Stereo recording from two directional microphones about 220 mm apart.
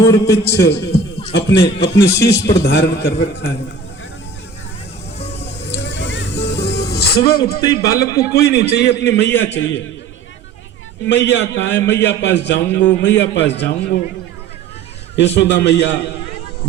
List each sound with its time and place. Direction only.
0.0 s a man's voice: 15° left (ahead or behind)
0.6 s a man's voice: 50° left (ahead or behind)
5.7 s music: 55° left (ahead or behind)
7.3 s a man's voice: 45° left (ahead or behind)
7.9 s a man's voice: 15° left (ahead or behind)
8.3 s a man's voice: 45° left (ahead or behind)
11.0 s a man's voice: 50° left (ahead or behind)
15.1 s a man's voice: 50° left (ahead or behind)